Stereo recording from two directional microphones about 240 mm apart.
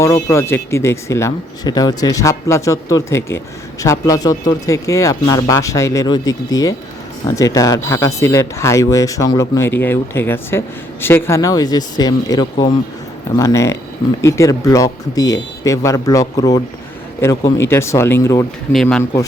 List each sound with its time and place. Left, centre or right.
0.0 s speech: centre